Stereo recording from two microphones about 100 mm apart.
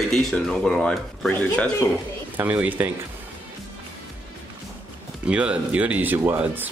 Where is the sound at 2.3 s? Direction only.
15° right (ahead or behind).